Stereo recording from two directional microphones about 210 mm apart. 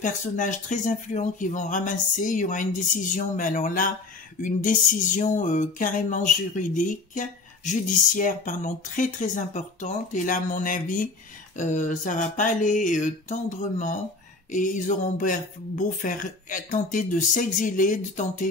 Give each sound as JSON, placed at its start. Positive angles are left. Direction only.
{"t": 0.0, "sound": "music", "side_deg": 35}